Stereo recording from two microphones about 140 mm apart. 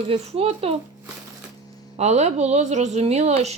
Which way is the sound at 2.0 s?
55° right (ahead or behind).